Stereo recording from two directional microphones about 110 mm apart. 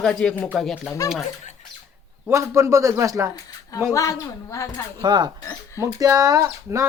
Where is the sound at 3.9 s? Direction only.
30° left (ahead or behind).